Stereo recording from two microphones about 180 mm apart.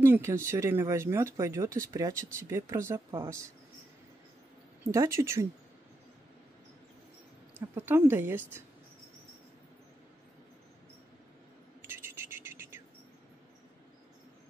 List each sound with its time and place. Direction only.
0.0 s speech: 15° right (ahead or behind)
4.9 s speech: 15° right (ahead or behind)
7.7 s speech: 10° right (ahead or behind)
11.8 s a sound: 15° right (ahead or behind)